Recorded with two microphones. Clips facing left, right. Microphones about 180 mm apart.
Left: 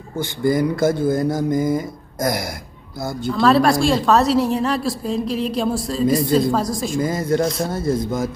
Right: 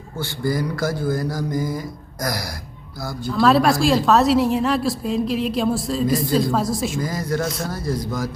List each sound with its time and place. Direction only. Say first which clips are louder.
0.2 s speech: left 5 dB; 20° left (ahead or behind)
3.3 s a woman's voice: left 1 dB; centre (ahead or behind)
7.0 s speech: left 5 dB; 25° left (ahead or behind)